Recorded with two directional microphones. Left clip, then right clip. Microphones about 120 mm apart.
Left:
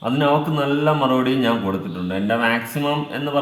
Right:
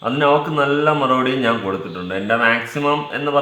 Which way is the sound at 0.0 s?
15° left (ahead or behind).